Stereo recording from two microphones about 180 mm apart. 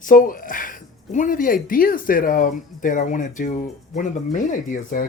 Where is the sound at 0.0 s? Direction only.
50° left (ahead or behind).